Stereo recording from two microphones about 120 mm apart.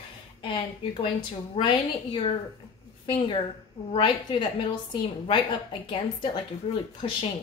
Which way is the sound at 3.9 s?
45° left (ahead or behind).